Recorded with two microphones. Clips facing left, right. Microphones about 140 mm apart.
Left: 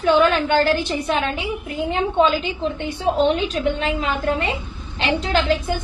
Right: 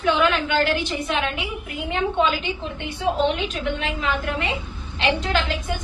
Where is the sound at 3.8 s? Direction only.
35° left (ahead or behind).